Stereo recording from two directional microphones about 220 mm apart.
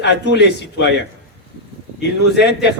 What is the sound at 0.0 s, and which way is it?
Speech, 50° left (ahead or behind).